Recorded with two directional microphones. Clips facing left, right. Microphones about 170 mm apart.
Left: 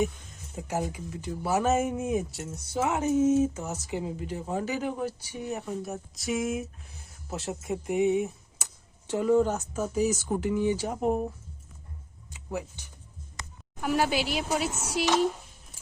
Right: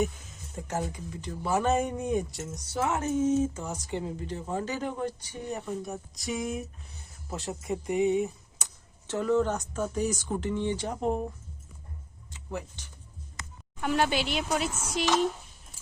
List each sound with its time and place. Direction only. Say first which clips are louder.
0.0 s speech: left 1 dB; 5° left (ahead or behind)
9.0 s speech: left 2 dB; 10° left (ahead or behind)
12.3 s speech: left 2 dB; 10° left (ahead or behind)